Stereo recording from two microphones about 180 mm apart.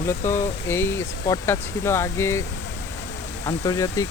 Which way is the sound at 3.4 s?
20° left (ahead or behind).